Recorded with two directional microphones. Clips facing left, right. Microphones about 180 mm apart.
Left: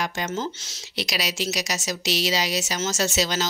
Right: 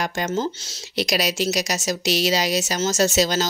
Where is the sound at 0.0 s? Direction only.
55° right (ahead or behind).